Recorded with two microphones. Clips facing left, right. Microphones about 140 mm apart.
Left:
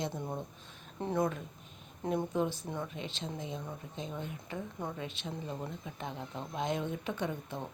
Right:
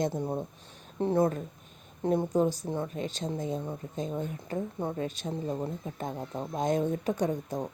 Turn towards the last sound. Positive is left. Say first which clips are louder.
# right 7 dB
turn(degrees=-40)  # may be behind; listen again after turning